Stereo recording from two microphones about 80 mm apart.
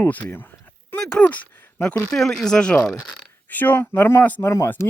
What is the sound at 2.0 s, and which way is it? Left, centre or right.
Speech, centre.